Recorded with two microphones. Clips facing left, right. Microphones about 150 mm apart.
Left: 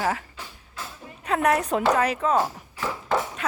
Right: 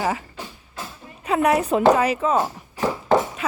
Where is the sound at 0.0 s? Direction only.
5° right (ahead or behind).